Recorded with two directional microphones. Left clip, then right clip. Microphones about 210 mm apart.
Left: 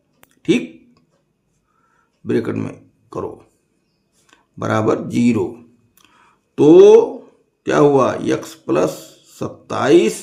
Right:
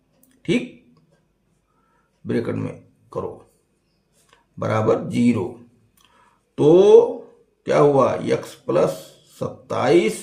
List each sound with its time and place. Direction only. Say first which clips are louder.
0.4 s a sound: left 5 dB; 35° left (ahead or behind)
2.2 s speech: left 4 dB; 35° left (ahead or behind)
4.3 s speech: left 3 dB; 35° left (ahead or behind)
6.6 s speech: left 4 dB; 35° left (ahead or behind)